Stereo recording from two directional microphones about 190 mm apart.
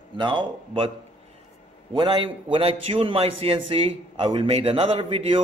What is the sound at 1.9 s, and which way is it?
A man's voice, 25° right (ahead or behind).